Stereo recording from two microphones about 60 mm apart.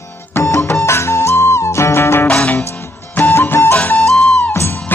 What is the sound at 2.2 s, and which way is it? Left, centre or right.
Music, left.